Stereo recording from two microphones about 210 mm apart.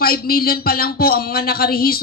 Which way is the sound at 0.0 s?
45° left (ahead or behind).